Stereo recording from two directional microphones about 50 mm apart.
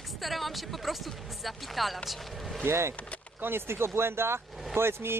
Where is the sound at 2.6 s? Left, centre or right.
Right.